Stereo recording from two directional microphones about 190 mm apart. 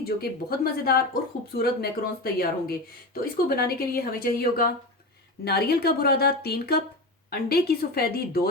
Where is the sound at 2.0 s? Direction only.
50° left (ahead or behind).